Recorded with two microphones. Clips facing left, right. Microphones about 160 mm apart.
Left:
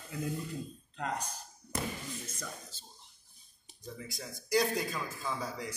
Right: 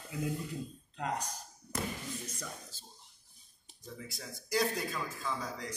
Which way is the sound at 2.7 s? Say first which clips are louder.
Even; 10° right (ahead or behind).